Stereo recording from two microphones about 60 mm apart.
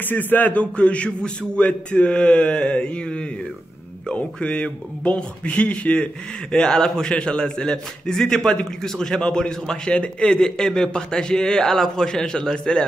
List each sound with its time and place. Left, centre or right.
0.1 s a man's voice: left; by 12.8 s centre